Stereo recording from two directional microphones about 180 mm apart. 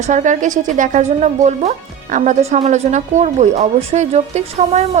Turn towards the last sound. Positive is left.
turn(degrees=-40)  # may be behind; listen again after turning